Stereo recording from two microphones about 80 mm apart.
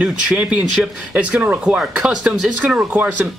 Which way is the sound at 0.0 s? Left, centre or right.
Centre.